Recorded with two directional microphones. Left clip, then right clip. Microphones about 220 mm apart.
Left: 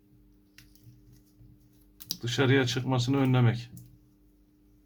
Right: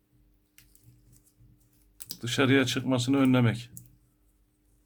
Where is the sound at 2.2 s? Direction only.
45° right (ahead or behind).